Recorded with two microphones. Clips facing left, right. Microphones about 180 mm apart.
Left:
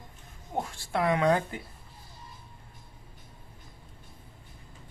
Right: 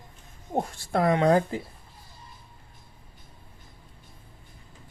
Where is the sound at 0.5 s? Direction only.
35° right (ahead or behind).